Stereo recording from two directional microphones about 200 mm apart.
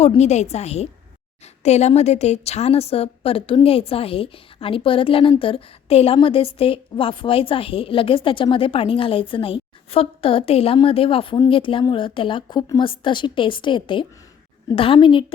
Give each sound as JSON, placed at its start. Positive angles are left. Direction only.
{"t": 0.0, "sound": "a woman's voice", "side_deg": 35}